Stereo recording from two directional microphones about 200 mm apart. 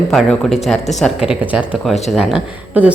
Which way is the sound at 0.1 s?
Centre (ahead or behind).